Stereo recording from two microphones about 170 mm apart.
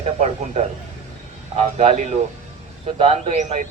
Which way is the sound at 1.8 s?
40° right (ahead or behind).